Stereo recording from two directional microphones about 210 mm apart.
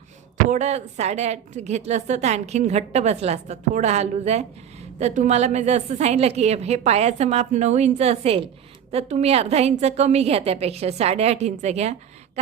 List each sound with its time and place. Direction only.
0.5 s a woman's voice: 35° right (ahead or behind)